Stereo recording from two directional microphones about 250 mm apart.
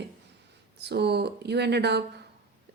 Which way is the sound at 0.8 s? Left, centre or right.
Right.